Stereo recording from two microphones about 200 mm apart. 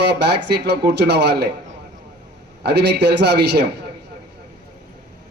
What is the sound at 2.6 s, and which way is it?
A man's voice, 60° right (ahead or behind).